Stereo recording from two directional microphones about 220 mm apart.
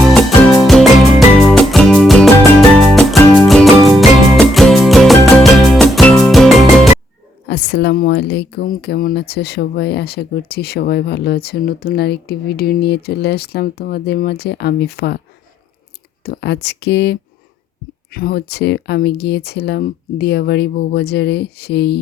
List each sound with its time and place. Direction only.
0.1 s music: centre (ahead or behind)
7.4 s speech: 50° left (ahead or behind)
16.2 s speech: 50° left (ahead or behind)